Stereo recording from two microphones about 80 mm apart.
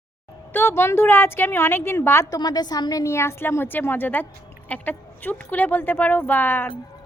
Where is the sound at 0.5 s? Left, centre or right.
Left.